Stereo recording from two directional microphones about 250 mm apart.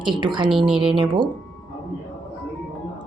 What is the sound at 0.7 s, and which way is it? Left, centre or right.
Speech, centre.